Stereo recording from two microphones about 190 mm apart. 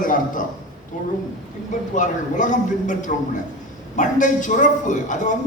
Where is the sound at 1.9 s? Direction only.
40° left (ahead or behind).